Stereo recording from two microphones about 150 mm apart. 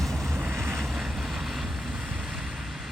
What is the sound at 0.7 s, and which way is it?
Vehicle, centre (ahead or behind).